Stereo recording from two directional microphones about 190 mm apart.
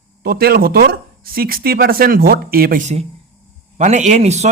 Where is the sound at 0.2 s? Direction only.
55° right (ahead or behind).